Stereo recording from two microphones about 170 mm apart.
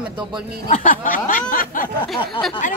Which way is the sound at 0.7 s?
50° left (ahead or behind).